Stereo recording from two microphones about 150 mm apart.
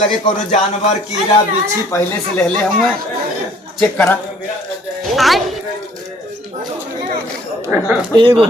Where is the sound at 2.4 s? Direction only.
5° left (ahead or behind).